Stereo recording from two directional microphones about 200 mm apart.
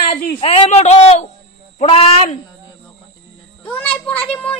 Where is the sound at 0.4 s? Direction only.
30° left (ahead or behind).